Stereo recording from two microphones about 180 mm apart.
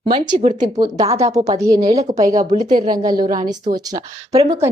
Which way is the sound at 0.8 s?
25° right (ahead or behind).